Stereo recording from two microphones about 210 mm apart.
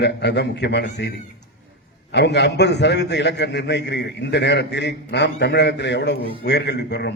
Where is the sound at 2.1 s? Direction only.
55° left (ahead or behind).